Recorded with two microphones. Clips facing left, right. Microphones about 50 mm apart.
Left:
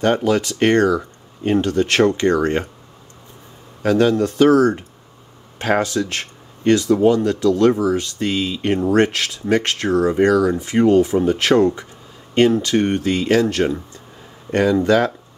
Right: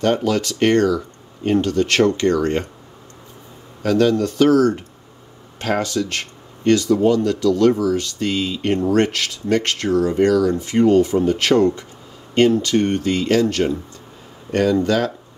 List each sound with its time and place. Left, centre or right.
0.0 s speech: centre
3.8 s speech: centre